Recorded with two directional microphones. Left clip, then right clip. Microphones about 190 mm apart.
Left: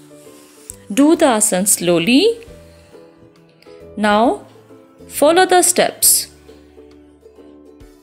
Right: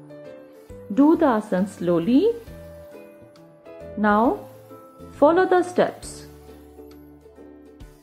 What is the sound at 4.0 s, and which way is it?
Speech, 25° left (ahead or behind).